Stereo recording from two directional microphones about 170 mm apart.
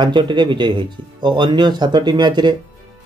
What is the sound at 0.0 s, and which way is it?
Speech, 25° right (ahead or behind).